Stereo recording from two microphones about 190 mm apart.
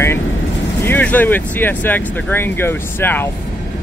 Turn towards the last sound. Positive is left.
turn(degrees=10)  # may be behind; listen again after turning